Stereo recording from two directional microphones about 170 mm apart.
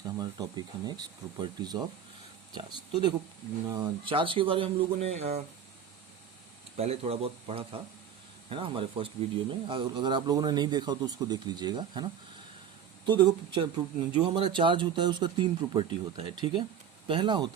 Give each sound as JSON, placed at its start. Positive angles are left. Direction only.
{"t": 0.2, "sound": "speech", "side_deg": -25}
{"t": 6.7, "sound": "speech", "side_deg": -35}